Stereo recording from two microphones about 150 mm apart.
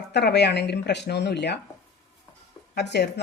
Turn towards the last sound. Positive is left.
turn(degrees=90)